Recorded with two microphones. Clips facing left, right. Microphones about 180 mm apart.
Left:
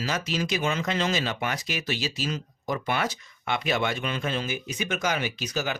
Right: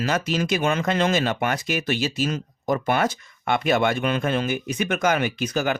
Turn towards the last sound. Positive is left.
turn(degrees=-55)  # may be behind; listen again after turning